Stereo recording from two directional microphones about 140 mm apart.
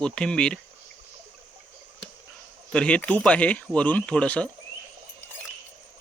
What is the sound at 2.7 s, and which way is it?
Speech, 5° left (ahead or behind).